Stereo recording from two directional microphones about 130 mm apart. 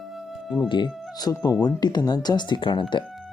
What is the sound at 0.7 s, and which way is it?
Speech, 35° left (ahead or behind).